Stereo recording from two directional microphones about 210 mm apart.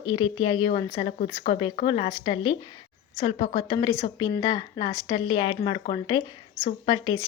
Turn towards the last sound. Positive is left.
turn(degrees=20)  # may be behind; listen again after turning